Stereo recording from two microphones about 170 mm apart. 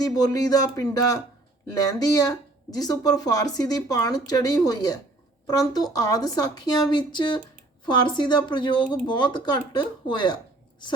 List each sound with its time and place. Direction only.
0.0 s speech: 20° left (ahead or behind)